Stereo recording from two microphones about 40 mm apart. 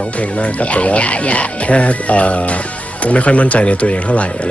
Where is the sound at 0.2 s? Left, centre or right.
Left.